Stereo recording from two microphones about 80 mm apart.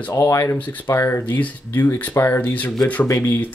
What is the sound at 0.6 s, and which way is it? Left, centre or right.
Speech, left.